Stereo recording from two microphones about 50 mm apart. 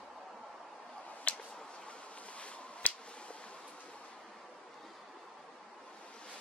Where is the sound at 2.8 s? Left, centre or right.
Left.